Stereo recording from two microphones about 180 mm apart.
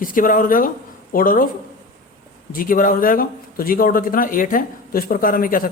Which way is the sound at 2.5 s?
50° left (ahead or behind).